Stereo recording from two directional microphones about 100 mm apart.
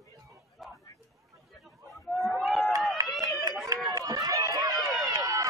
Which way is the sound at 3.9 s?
40° right (ahead or behind).